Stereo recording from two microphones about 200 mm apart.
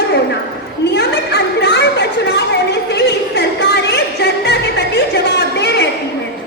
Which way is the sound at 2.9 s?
55° left (ahead or behind).